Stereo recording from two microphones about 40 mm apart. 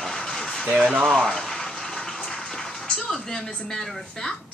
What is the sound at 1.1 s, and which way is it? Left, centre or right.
Speech, left.